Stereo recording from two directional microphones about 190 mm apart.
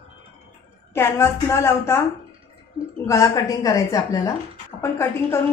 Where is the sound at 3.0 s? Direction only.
15° left (ahead or behind).